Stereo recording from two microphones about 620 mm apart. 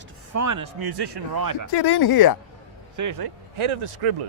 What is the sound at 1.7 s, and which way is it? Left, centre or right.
Speech, left.